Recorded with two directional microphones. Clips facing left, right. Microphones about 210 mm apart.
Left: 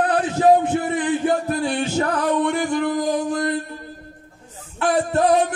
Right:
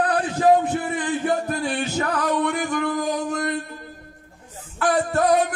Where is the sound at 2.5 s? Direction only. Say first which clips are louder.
Left 3 dB; 30° left (ahead or behind).